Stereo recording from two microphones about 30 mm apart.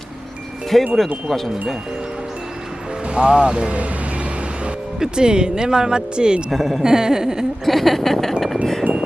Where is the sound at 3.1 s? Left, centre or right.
Right.